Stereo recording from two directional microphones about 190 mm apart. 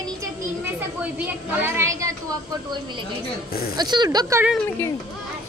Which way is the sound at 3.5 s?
55° left (ahead or behind).